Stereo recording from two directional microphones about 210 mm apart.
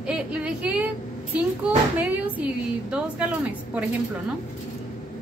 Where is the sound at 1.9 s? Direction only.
5° right (ahead or behind).